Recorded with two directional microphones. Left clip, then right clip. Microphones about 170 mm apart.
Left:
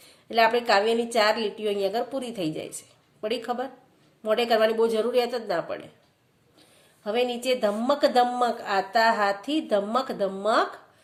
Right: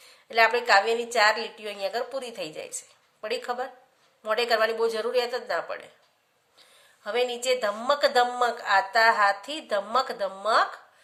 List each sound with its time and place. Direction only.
0.0 s a woman's voice: 15° right (ahead or behind)